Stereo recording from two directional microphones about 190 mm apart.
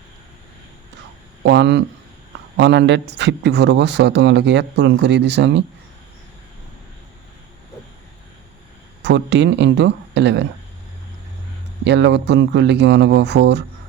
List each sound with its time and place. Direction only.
1.5 s speech: 65° right (ahead or behind)
9.0 s speech: 65° right (ahead or behind)
11.9 s speech: 65° right (ahead or behind)